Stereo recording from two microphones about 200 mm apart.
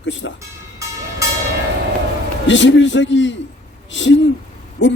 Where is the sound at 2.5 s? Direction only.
65° left (ahead or behind).